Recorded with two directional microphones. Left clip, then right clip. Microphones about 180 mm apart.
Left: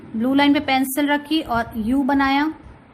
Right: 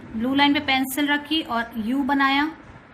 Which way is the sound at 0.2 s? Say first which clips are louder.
Left 2 dB; 60° left (ahead or behind).